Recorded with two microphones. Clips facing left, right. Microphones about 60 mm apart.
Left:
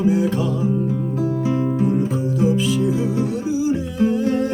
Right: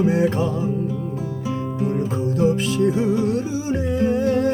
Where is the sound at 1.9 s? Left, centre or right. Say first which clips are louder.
Left 2 dB; right.